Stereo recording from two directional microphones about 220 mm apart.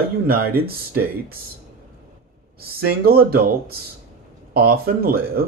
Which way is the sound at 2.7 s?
45° right (ahead or behind).